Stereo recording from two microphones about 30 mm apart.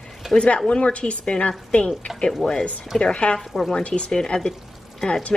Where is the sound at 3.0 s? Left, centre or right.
Left.